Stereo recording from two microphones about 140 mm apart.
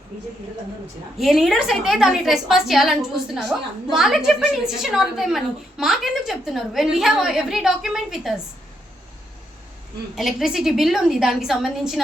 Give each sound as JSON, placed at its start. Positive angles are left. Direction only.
{"t": 1.2, "sound": "a woman's voice", "side_deg": 0}
{"t": 10.2, "sound": "a woman's voice", "side_deg": 0}